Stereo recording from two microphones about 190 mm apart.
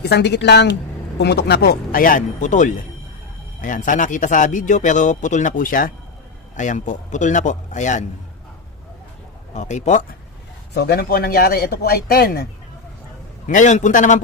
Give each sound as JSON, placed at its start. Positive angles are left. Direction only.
{"t": 0.0, "sound": "a man's voice", "side_deg": 60}
{"t": 9.6, "sound": "a man's voice", "side_deg": 40}
{"t": 10.8, "sound": "a man's voice", "side_deg": 55}
{"t": 13.5, "sound": "a man's voice", "side_deg": 40}